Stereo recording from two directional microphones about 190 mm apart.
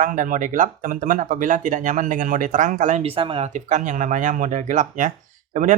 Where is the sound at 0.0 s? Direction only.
45° right (ahead or behind).